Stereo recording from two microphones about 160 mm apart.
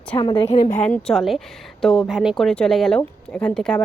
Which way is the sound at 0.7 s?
5° left (ahead or behind).